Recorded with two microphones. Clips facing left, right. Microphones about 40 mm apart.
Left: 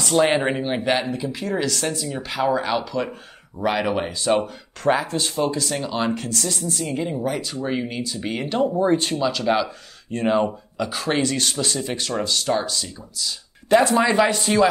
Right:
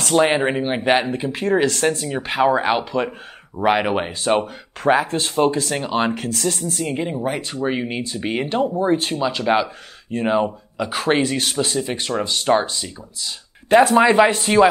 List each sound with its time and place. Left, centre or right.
0.1 s speech: centre
1.0 s speech: right
8.9 s speech: centre
9.4 s speech: right
10.1 s speech: centre
10.9 s speech: right
11.1 s speech: centre